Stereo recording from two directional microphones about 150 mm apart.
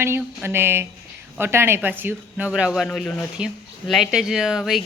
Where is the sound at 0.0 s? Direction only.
15° right (ahead or behind).